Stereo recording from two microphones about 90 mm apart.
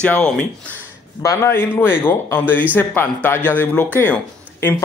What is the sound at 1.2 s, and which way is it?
Speech, 30° left (ahead or behind).